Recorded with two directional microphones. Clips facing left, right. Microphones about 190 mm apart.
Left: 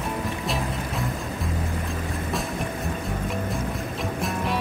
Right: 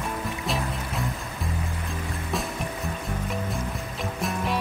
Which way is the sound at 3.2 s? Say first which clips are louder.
Left 2 dB; centre (ahead or behind).